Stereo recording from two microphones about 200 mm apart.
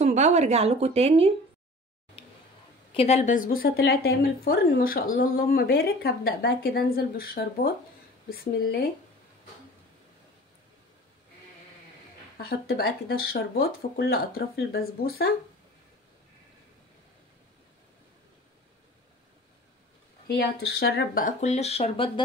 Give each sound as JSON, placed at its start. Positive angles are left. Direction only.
{"t": 0.0, "sound": "a woman's voice", "side_deg": -35}
{"t": 2.2, "sound": "a sound", "side_deg": 25}
{"t": 2.9, "sound": "speech", "side_deg": 30}
{"t": 12.4, "sound": "speech", "side_deg": 50}
{"t": 20.2, "sound": "speech", "side_deg": 55}